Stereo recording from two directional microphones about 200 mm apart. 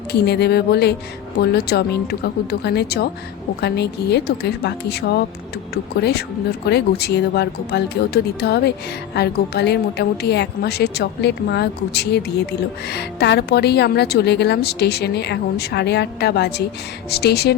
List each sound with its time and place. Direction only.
0.1 s a woman's voice: 55° left (ahead or behind)